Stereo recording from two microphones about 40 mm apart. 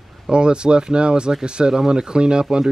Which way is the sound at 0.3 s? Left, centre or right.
Right.